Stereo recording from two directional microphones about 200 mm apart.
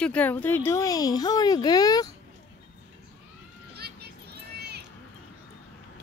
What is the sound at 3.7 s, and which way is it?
Children playing, 55° right (ahead or behind).